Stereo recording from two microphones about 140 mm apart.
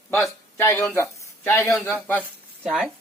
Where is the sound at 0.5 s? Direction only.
20° left (ahead or behind).